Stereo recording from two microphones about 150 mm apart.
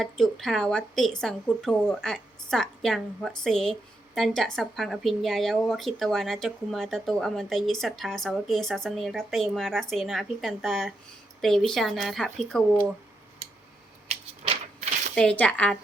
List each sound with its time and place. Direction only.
0.0 s speech: centre (ahead or behind)
14.1 s a sound: 45° right (ahead or behind)
15.1 s speech: 5° left (ahead or behind)